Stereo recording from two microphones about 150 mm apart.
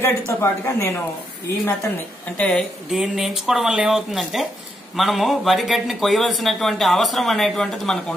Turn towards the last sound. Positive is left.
turn(degrees=5)  # may be behind; listen again after turning